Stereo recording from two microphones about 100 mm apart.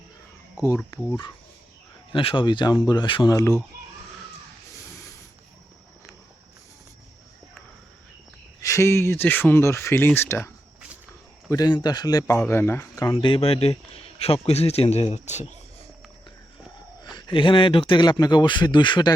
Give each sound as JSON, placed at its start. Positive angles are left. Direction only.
{"t": 0.5, "sound": "speech", "side_deg": 30}
{"t": 2.1, "sound": "speech", "side_deg": 55}
{"t": 3.2, "sound": "speech", "side_deg": 35}
{"t": 8.6, "sound": "speech", "side_deg": 30}
{"t": 11.4, "sound": "speech", "side_deg": 40}
{"t": 12.5, "sound": "speech", "side_deg": 20}
{"t": 13.2, "sound": "a man's voice", "side_deg": 70}
{"t": 17.2, "sound": "speech", "side_deg": 55}